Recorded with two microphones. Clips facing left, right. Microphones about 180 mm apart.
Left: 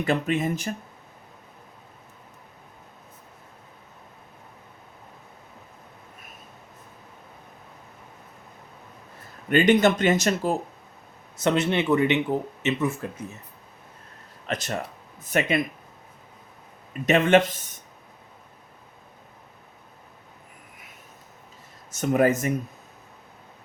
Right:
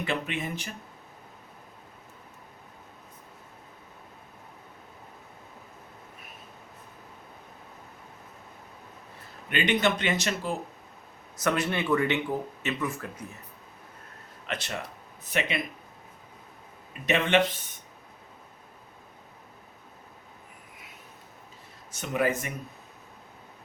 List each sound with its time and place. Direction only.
0.0 s speech: 40° left (ahead or behind)
9.5 s speech: 45° left (ahead or behind)
11.3 s speech: 25° left (ahead or behind)
14.4 s speech: 40° left (ahead or behind)
17.1 s speech: 45° left (ahead or behind)
21.9 s speech: 45° left (ahead or behind)